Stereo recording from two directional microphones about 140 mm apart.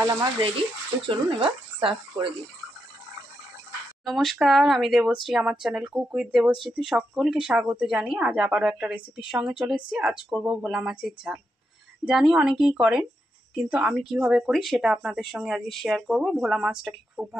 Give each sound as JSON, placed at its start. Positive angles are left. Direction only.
{"t": 0.0, "sound": "speech", "side_deg": -25}
{"t": 0.4, "sound": "speech", "side_deg": -40}
{"t": 4.0, "sound": "a woman's voice", "side_deg": 0}